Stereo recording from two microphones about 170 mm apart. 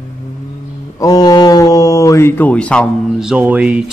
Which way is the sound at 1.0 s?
20° left (ahead or behind).